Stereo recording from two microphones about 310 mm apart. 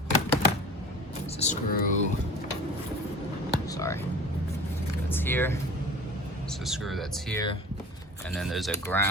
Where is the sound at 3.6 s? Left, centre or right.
Centre.